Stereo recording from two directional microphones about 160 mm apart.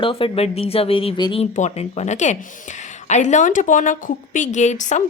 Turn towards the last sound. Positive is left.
turn(degrees=50)  # may be behind; listen again after turning